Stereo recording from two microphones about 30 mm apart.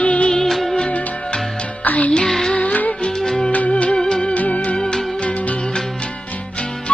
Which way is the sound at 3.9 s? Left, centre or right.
Left.